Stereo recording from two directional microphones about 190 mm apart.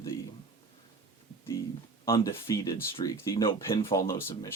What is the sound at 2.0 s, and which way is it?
Speech, 15° left (ahead or behind).